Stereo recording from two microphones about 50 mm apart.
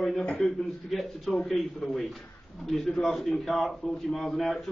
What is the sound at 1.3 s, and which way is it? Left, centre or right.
Speech, centre.